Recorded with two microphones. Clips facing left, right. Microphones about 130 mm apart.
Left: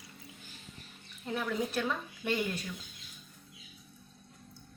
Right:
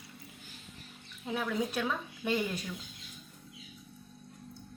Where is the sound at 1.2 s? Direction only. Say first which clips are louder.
Even; 5° right (ahead or behind).